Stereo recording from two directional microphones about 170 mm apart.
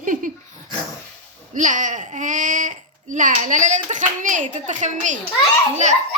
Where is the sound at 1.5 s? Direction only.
50° right (ahead or behind).